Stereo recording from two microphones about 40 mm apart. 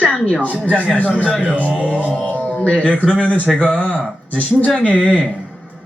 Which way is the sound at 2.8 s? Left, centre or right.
Left.